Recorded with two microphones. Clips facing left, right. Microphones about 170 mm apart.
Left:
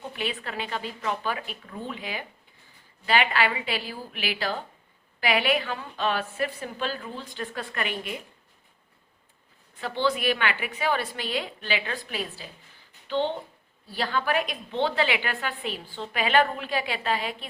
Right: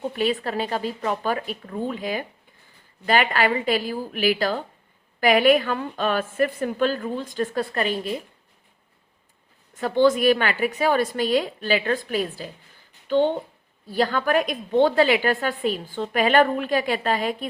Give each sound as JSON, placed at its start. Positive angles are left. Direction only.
{"t": 0.1, "sound": "a woman's voice", "side_deg": -40}
{"t": 9.7, "sound": "a woman's voice", "side_deg": -45}